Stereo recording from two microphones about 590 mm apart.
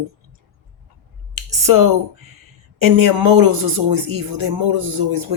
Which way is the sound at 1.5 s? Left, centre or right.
Right.